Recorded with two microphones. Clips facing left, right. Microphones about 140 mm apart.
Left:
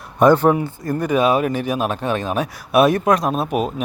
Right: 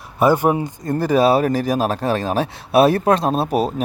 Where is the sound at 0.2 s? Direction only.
10° right (ahead or behind).